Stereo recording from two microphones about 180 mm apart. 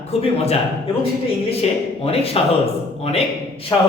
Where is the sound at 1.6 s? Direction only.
35° left (ahead or behind).